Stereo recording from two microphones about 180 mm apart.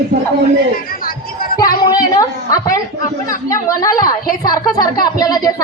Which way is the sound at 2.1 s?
20° left (ahead or behind).